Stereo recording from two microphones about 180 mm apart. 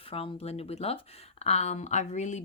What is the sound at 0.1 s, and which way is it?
Speech, 30° left (ahead or behind).